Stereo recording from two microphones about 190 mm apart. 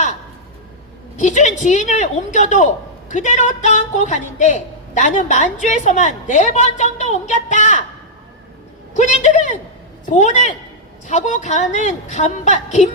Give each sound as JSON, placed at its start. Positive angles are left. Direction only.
{"t": 1.1, "sound": "a woman's voice", "side_deg": 40}
{"t": 9.0, "sound": "a man's voice", "side_deg": 40}